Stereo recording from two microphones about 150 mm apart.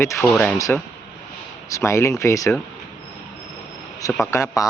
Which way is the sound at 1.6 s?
20° left (ahead or behind).